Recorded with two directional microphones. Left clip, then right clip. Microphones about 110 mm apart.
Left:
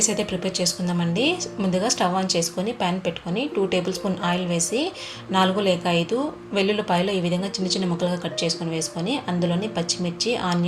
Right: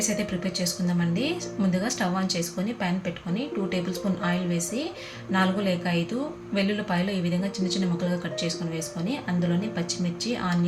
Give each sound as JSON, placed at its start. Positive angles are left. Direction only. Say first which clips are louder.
{"t": 0.0, "sound": "a woman's voice", "louder": "left 5 dB", "side_deg": 35}
{"t": 5.3, "sound": "a woman's voice", "louder": "left 5 dB", "side_deg": 35}